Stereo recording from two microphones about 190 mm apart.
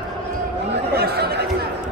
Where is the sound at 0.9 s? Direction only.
55° right (ahead or behind).